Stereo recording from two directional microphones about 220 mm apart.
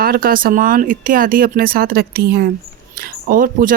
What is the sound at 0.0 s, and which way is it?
Speech, 40° right (ahead or behind).